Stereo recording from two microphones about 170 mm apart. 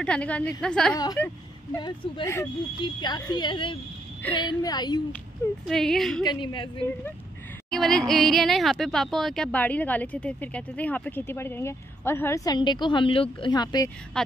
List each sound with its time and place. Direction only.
0.0 s speech: 5° left (ahead or behind)
0.9 s speech: 25° left (ahead or behind)
5.7 s a woman's voice: centre (ahead or behind)
6.2 s speech: 25° left (ahead or behind)
7.7 s speech: 5° left (ahead or behind)
12.5 s speech: 25° left (ahead or behind)
14.2 s a woman's voice: 5° left (ahead or behind)